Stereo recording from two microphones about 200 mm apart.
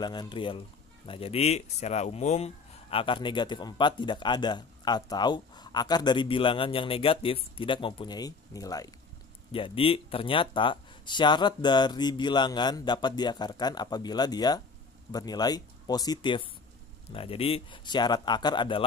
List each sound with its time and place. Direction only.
0.0 s speech: 20° left (ahead or behind)